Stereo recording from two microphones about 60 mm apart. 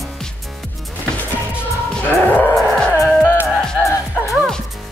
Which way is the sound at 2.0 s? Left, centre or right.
Left.